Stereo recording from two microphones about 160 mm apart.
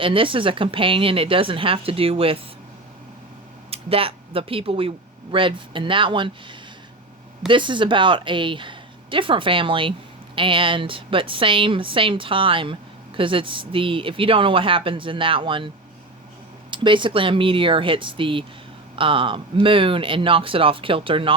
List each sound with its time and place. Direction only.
0.0 s speech: 35° right (ahead or behind)
3.7 s speech: 35° right (ahead or behind)
16.7 s speech: 30° right (ahead or behind)